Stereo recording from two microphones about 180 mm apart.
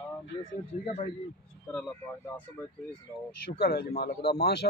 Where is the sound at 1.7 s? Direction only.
5° left (ahead or behind).